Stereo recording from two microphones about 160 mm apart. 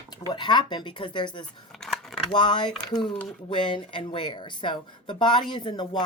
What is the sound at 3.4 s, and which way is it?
Speech, 30° left (ahead or behind).